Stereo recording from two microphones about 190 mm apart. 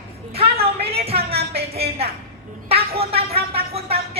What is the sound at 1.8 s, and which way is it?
Speech, 55° right (ahead or behind).